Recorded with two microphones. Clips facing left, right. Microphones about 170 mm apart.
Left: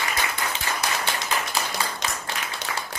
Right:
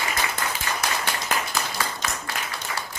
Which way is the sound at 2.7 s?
90° left.